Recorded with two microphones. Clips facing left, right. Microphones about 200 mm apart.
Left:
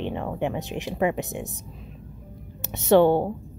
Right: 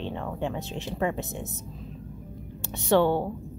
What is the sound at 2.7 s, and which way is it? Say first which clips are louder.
Speech: left 5 dB; 20° left (ahead or behind).